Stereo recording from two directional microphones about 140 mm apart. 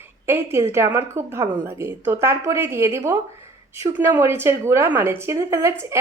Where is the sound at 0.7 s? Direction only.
15° right (ahead or behind).